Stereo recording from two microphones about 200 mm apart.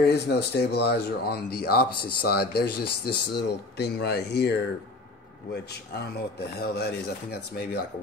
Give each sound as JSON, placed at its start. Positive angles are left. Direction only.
{"t": 0.0, "sound": "speech", "side_deg": 55}
{"t": 6.5, "sound": "speech", "side_deg": 55}